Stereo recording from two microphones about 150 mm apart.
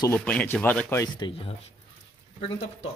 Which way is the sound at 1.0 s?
30° left (ahead or behind).